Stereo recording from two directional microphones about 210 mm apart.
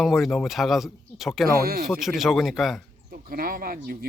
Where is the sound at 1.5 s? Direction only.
45° right (ahead or behind).